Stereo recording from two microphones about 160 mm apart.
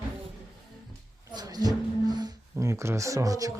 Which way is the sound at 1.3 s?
25° right (ahead or behind).